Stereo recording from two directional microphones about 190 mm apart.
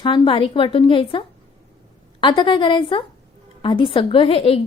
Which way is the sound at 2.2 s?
25° left (ahead or behind).